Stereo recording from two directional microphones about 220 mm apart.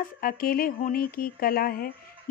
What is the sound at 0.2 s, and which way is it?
Speech, 40° left (ahead or behind).